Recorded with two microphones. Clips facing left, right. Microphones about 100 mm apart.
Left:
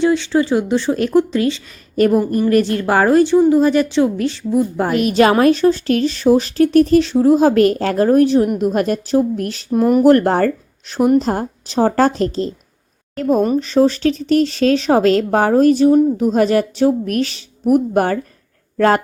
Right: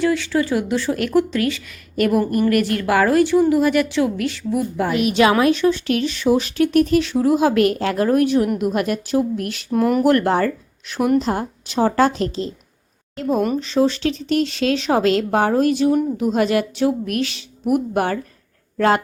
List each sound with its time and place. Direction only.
0.0 s a woman's voice: 25° left (ahead or behind)
4.9 s a woman's voice: 45° left (ahead or behind)
9.7 s speech: 20° left (ahead or behind)
10.0 s a woman's voice: 35° left (ahead or behind)
13.6 s a woman's voice: 45° left (ahead or behind)